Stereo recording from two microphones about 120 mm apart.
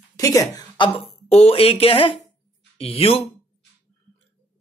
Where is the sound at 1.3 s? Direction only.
55° left (ahead or behind).